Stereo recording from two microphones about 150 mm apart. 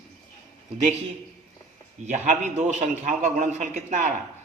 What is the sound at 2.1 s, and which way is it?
Speech, 50° right (ahead or behind).